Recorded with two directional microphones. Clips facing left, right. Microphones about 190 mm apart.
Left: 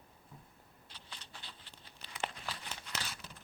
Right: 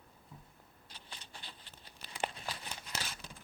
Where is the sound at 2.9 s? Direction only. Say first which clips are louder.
Even; 40° right (ahead or behind).